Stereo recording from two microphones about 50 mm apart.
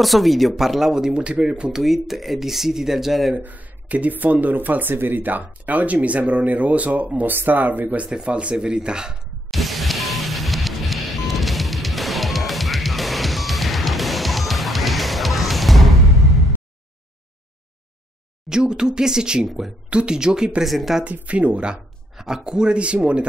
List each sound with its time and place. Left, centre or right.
0.0 s speech: centre; by 1.7 s right
1.7 s speech: centre
3.3 s speech: right
8.1 s speech: right
9.5 s music: centre
18.5 s speech: centre
19.9 s speech: centre
20.6 s speech: centre
21.0 s speech: right
22.1 s speech: centre